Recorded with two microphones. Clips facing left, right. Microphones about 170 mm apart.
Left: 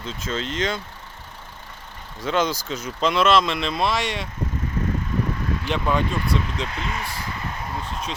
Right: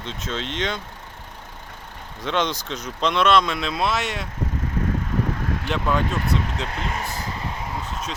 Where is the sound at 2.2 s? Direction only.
Centre (ahead or behind).